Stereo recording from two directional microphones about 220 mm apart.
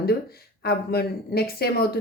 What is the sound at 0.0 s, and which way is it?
Speech, 45° left (ahead or behind).